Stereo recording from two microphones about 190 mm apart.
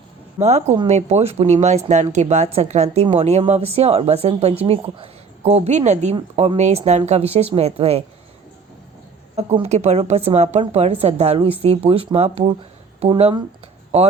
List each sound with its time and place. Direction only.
0.3 s speech: 35° right (ahead or behind)
9.3 s speech: 35° right (ahead or behind)